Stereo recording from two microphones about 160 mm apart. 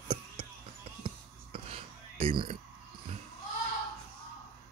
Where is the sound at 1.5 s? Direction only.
35° right (ahead or behind).